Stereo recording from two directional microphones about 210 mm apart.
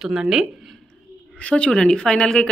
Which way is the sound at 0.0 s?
5° right (ahead or behind).